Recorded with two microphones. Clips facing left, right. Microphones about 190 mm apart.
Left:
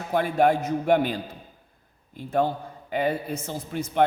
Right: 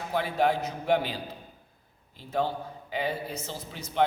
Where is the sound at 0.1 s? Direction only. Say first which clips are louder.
Left 5 dB; 50° left (ahead or behind).